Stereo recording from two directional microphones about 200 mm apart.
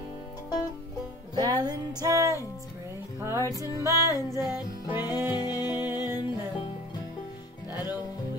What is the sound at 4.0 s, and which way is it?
Music, 15° left (ahead or behind).